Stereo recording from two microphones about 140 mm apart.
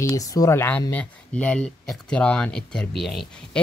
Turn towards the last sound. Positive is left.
turn(degrees=5)  # may be behind; listen again after turning